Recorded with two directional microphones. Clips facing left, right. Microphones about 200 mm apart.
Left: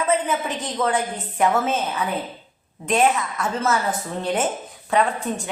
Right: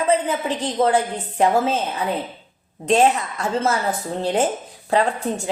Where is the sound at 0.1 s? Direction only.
30° right (ahead or behind).